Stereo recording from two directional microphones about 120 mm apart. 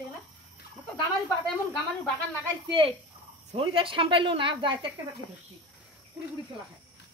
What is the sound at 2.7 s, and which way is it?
Speech, 50° right (ahead or behind).